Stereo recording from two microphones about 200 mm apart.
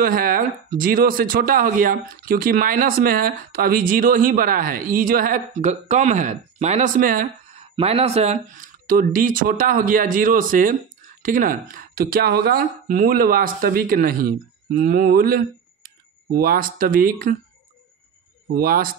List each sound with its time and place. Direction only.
0.0 s speech: 45° right (ahead or behind)
7.7 s speech: 30° right (ahead or behind); by 17.4 s 45° right (ahead or behind)
18.5 s speech: 45° right (ahead or behind)